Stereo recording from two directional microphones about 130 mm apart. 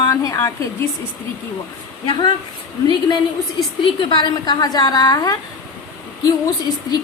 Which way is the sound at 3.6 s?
35° left (ahead or behind).